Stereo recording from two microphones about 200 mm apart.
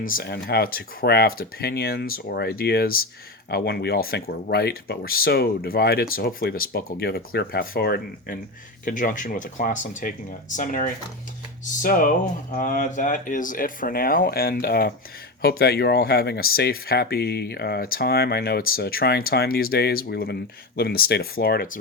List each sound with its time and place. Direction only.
0.0 s speech: 45° left (ahead or behind)